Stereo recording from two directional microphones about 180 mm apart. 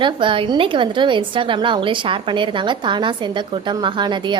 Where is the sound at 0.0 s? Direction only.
25° right (ahead or behind).